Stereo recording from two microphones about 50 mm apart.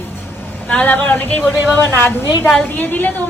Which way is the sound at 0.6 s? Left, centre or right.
Left.